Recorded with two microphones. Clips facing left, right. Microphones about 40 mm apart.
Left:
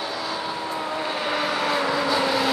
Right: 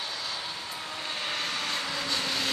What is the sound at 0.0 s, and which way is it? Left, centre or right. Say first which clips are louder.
Vehicle: left 7 dB; centre.